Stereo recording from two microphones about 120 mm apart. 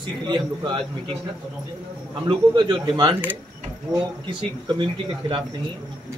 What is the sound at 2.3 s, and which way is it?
Speech, 40° right (ahead or behind).